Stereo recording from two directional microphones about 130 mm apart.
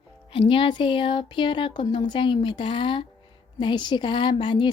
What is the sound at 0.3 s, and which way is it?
A woman's voice, 45° left (ahead or behind).